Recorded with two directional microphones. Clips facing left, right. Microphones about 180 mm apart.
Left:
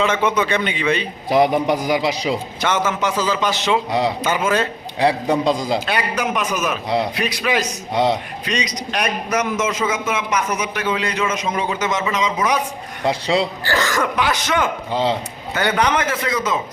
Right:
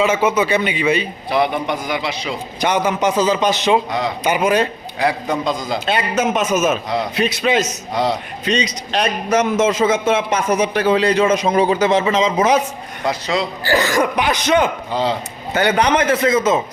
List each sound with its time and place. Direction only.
0.0 s speech: 10° right (ahead or behind)
1.4 s a man's voice: 35° left (ahead or behind)
2.6 s a man's voice: 15° right (ahead or behind)
4.9 s a man's voice: 30° left (ahead or behind)
5.8 s a man's voice: 25° right (ahead or behind)
7.9 s a man's voice: 25° left (ahead or behind)
8.4 s a man's voice: 30° right (ahead or behind)
13.1 s a man's voice: 30° left (ahead or behind)
13.7 s speech: 15° right (ahead or behind)
15.5 s a man's voice: 30° right (ahead or behind)